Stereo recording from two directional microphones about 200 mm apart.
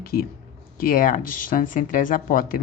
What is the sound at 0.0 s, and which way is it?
Speech, 50° left (ahead or behind).